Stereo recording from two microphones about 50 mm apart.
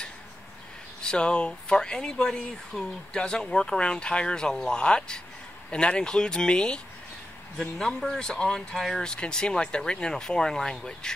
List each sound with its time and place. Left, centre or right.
1.0 s speech: left